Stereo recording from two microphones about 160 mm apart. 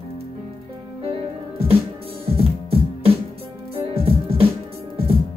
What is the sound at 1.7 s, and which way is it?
Music, 35° right (ahead or behind).